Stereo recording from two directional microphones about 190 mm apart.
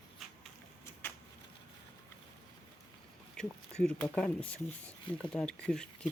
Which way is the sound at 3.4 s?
5° left (ahead or behind).